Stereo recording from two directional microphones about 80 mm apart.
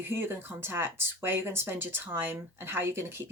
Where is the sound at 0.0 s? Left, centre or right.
Right.